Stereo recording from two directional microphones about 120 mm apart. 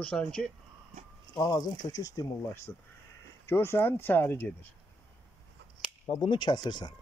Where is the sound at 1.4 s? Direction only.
35° left (ahead or behind).